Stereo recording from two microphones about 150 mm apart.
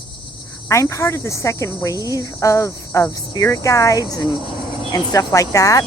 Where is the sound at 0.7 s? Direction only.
20° left (ahead or behind).